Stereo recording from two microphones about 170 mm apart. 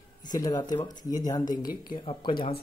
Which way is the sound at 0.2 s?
25° left (ahead or behind).